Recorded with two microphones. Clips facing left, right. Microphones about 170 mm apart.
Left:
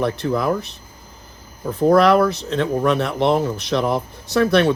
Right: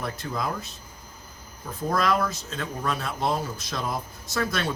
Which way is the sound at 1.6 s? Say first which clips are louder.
Left 12 dB; 65° left (ahead or behind).